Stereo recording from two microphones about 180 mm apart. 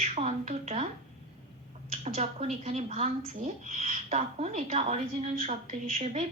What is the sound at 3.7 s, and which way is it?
A woman's voice, 45° right (ahead or behind).